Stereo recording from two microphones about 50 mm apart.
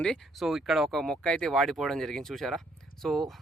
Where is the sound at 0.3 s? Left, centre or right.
Centre.